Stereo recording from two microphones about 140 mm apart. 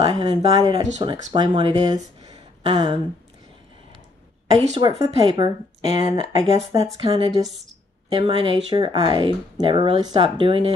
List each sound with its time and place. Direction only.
0.0 s speech: 30° right (ahead or behind)
4.7 s speech: 30° right (ahead or behind)
5.9 s speech: 50° left (ahead or behind)
6.8 s speech: 30° right (ahead or behind)